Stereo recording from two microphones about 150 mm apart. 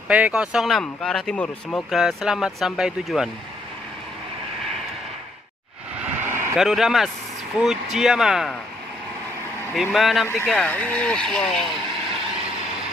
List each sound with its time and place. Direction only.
0.1 s speech: 5° right (ahead or behind); by 1.9 s 10° left (ahead or behind)
1.9 s speech: centre (ahead or behind)
5.9 s vehicle: 15° right (ahead or behind)
6.5 s speech: centre (ahead or behind)
9.8 s speech: centre (ahead or behind)
10.2 s speech: 15° left (ahead or behind)